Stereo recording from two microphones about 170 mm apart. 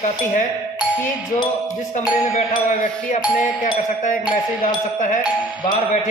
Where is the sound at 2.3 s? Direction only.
45° left (ahead or behind).